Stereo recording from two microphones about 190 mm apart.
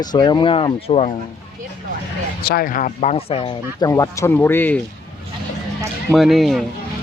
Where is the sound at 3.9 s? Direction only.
15° left (ahead or behind).